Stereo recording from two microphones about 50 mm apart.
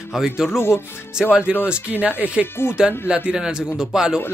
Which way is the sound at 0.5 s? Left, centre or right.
Left.